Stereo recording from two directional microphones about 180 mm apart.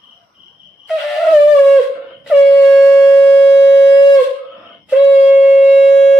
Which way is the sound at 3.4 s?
15° left (ahead or behind).